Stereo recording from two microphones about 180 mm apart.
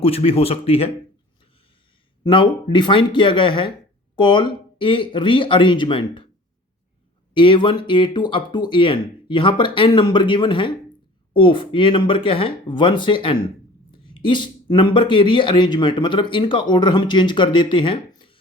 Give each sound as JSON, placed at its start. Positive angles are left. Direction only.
{"t": 0.0, "sound": "speech", "side_deg": 30}
{"t": 2.2, "sound": "speech", "side_deg": 25}
{"t": 7.3, "sound": "speech", "side_deg": 25}